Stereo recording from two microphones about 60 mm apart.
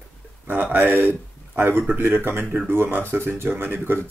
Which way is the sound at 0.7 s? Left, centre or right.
Right.